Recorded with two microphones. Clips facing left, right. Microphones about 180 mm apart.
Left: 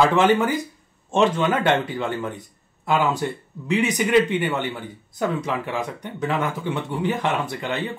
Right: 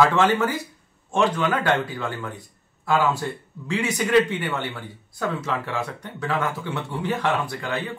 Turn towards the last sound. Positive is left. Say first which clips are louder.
# left 2 dB
turn(degrees=20)  # may be behind; listen again after turning